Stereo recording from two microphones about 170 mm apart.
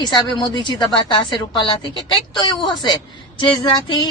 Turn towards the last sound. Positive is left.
turn(degrees=25)  # may be behind; listen again after turning